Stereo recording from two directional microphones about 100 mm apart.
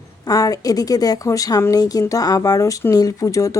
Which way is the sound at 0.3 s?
35° left (ahead or behind).